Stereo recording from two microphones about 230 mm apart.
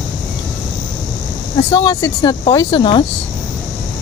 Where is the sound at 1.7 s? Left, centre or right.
Centre.